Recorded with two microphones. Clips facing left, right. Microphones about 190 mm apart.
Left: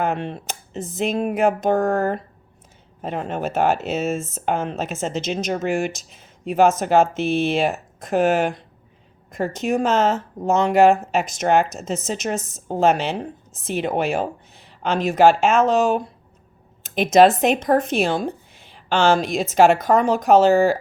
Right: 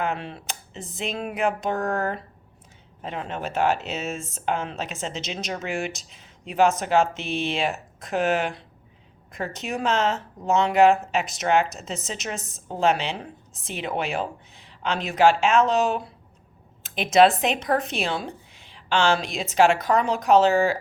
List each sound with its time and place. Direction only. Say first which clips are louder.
0.0 s speech: left 5 dB; 45° left (ahead or behind)